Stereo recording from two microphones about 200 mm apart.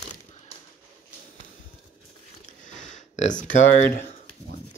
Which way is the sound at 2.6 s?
35° left (ahead or behind).